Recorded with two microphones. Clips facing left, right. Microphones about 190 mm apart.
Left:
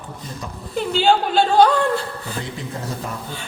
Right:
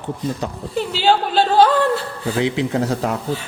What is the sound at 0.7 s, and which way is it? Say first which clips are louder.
Speech: even; 5° right (ahead or behind).